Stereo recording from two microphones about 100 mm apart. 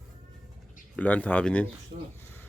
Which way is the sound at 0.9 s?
15° left (ahead or behind).